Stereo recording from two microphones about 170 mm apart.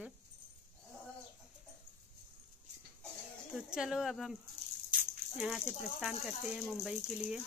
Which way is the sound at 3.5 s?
5° right (ahead or behind).